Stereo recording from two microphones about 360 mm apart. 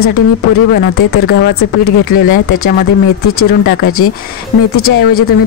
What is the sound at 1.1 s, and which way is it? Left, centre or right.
Speech, left.